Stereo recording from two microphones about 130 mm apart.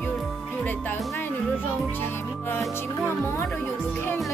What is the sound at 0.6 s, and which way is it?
Speech, 15° left (ahead or behind).